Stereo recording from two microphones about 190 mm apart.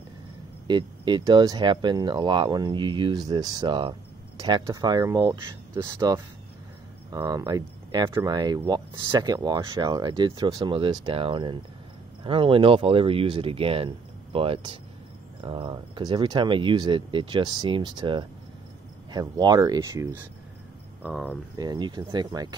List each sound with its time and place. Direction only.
0.7 s speech: 25° right (ahead or behind)
21.0 s speech: 5° left (ahead or behind)
21.5 s speech: 20° right (ahead or behind)